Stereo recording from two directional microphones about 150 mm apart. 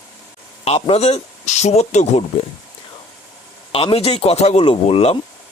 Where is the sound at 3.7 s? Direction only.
40° left (ahead or behind).